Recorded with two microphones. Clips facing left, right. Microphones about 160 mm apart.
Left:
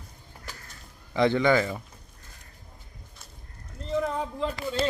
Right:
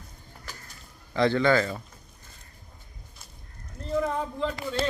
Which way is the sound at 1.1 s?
15° left (ahead or behind).